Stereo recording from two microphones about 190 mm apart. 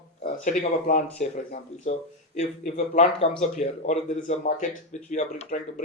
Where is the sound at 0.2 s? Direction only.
45° left (ahead or behind).